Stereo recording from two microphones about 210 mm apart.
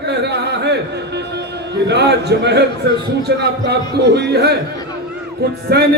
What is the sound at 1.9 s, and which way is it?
A man's voice, 55° right (ahead or behind).